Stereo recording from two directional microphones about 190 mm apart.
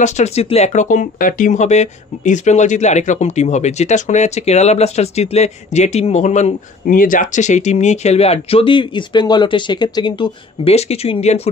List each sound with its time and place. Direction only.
0.0 s speech: 35° left (ahead or behind)